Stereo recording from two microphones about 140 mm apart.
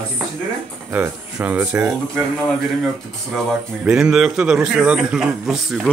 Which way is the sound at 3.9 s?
5° right (ahead or behind).